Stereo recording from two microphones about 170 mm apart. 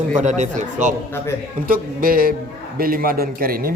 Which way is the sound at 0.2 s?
45° right (ahead or behind).